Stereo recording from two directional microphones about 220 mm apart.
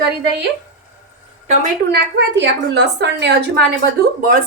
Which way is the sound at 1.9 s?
50° right (ahead or behind).